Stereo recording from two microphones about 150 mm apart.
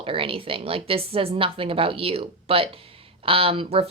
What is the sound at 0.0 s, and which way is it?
A woman's voice, 35° right (ahead or behind).